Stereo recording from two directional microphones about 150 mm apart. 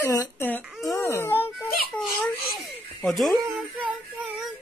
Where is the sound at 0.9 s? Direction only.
20° left (ahead or behind).